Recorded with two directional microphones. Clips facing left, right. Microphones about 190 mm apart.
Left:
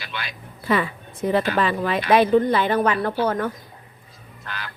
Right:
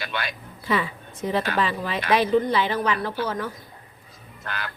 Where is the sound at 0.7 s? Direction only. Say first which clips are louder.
Left 3 dB; 55° left (ahead or behind).